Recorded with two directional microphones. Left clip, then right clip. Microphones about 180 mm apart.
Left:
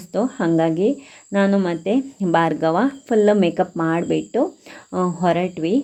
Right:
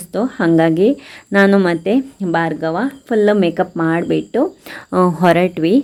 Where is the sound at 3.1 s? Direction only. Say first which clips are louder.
Right 3 dB; 10° right (ahead or behind).